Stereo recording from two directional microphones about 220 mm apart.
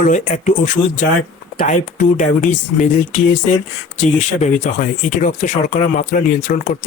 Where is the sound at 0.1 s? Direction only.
35° left (ahead or behind).